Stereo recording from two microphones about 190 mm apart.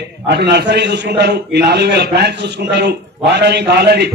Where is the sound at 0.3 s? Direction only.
60° right (ahead or behind).